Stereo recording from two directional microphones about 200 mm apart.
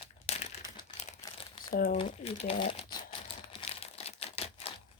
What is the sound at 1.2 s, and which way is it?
Crumpling, 25° left (ahead or behind).